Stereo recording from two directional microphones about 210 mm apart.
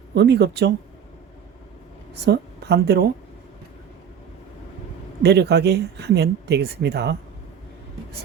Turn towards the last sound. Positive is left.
turn(degrees=-50)  # may be behind; listen again after turning